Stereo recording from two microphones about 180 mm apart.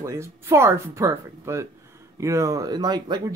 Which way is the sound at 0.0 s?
15° right (ahead or behind).